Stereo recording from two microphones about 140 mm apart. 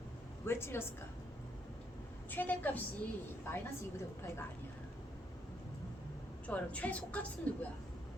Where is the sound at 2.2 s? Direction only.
15° left (ahead or behind).